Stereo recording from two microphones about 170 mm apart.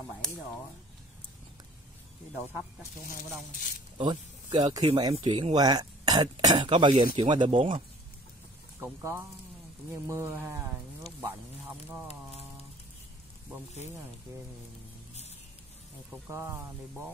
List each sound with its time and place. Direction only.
3.5 s speech: 55° left (ahead or behind)
4.0 s speech: 25° right (ahead or behind)
8.7 s speech: 15° right (ahead or behind)
16.3 s speech: 15° right (ahead or behind)